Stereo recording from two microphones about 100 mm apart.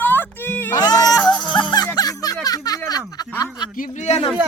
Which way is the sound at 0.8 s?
40° left (ahead or behind).